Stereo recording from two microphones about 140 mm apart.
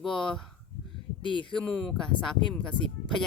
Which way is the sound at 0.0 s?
5° left (ahead or behind).